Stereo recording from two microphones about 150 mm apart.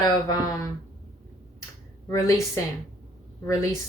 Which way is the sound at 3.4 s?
20° left (ahead or behind).